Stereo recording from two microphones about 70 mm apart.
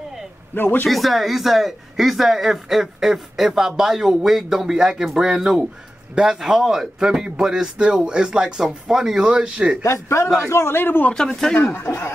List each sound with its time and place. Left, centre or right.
0.6 s a man's voice: left
0.8 s speech: centre
9.8 s a man's voice: left
11.1 s speech: centre
11.7 s a man's voice: left